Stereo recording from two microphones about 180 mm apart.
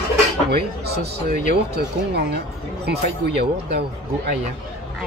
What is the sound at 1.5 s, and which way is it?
Speech, 65° right (ahead or behind).